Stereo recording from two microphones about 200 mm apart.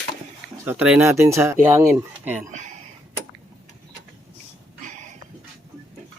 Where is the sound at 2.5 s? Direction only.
40° right (ahead or behind).